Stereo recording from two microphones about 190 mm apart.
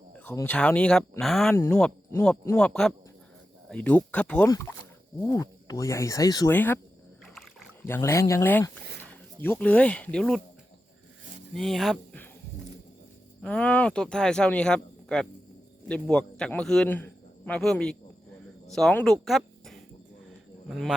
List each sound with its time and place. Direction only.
0.2 s speech: 10° left (ahead or behind)
4.4 s speech: 15° left (ahead or behind)
7.9 s speech: 15° left (ahead or behind)
11.5 s speech: centre (ahead or behind)
13.4 s a man's voice: 5° left (ahead or behind)
19.2 s a sound: centre (ahead or behind)
20.7 s speech: centre (ahead or behind)